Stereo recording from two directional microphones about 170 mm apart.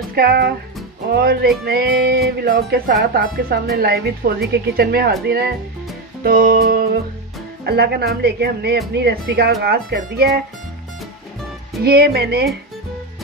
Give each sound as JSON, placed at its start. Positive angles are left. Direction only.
{"t": 0.1, "sound": "speech", "side_deg": -65}
{"t": 1.1, "sound": "music", "side_deg": -65}
{"t": 7.6, "sound": "speech", "side_deg": -75}
{"t": 11.8, "sound": "speech", "side_deg": -65}